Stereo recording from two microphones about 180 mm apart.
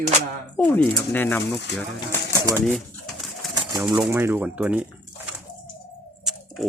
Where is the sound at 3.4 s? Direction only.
Centre (ahead or behind).